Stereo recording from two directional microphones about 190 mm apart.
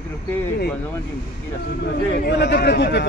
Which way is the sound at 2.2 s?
60° left (ahead or behind).